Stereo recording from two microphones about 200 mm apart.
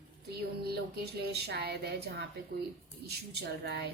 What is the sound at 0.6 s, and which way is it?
A woman's voice, 55° right (ahead or behind).